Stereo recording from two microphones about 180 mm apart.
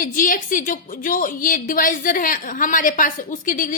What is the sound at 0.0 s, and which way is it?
A woman's voice, 50° left (ahead or behind).